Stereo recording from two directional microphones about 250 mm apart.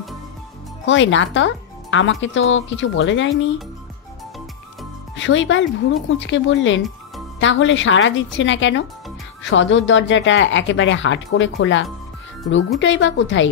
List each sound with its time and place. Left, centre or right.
0.8 s speech: left
5.1 s speech: left